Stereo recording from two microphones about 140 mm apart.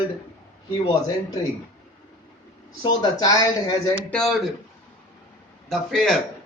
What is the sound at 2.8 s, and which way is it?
Speech, 30° left (ahead or behind).